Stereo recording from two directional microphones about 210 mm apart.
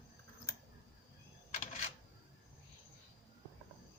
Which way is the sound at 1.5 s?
35° left (ahead or behind).